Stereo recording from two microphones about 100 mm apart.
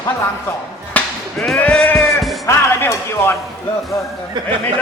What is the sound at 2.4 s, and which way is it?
Speech, 25° left (ahead or behind).